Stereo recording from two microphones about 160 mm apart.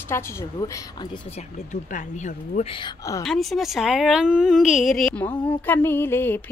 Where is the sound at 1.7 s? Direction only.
50° left (ahead or behind).